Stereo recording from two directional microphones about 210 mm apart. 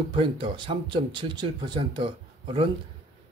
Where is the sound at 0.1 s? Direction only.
25° right (ahead or behind).